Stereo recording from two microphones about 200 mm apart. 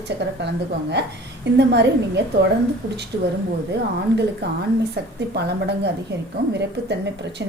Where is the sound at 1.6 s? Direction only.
60° right (ahead or behind).